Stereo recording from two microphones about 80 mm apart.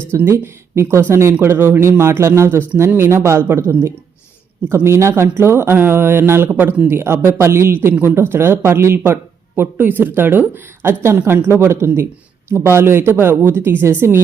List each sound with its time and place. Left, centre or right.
0.1 s speech: right